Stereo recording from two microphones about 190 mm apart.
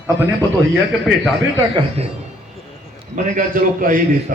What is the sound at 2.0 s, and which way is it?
Speech, 35° right (ahead or behind).